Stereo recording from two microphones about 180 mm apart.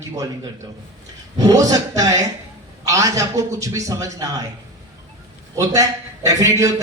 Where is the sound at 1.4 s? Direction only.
20° right (ahead or behind).